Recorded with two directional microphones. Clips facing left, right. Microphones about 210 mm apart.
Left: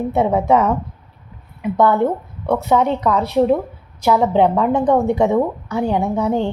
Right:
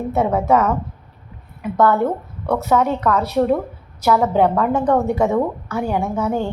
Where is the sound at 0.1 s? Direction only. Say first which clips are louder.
Even; 15° left (ahead or behind).